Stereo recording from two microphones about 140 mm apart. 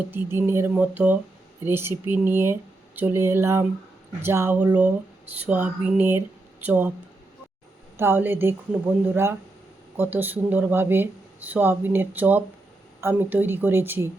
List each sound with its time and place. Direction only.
0.1 s speech: 15° right (ahead or behind)
7.9 s speech: 15° right (ahead or behind)